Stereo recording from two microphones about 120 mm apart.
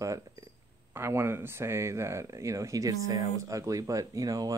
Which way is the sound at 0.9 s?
20° right (ahead or behind).